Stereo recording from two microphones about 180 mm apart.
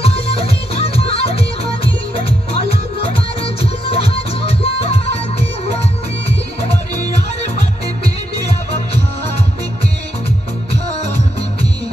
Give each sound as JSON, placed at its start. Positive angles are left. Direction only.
{"t": 0.0, "sound": "music", "side_deg": 35}
{"t": 3.9, "sound": "music", "side_deg": 35}